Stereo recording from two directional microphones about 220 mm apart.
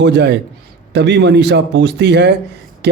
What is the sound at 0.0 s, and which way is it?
A man's voice, 50° right (ahead or behind).